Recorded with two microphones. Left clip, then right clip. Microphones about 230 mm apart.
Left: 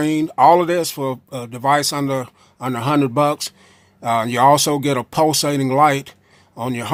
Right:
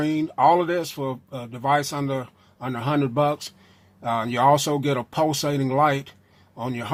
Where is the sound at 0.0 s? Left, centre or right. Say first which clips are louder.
Left 6 dB; left.